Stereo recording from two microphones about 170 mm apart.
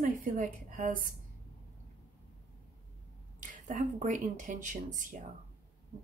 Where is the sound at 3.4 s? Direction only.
50° right (ahead or behind).